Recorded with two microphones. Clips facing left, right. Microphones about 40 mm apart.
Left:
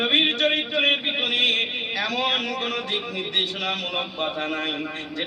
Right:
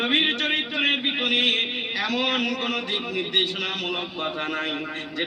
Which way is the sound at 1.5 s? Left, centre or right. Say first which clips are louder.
Left 1 dB; right.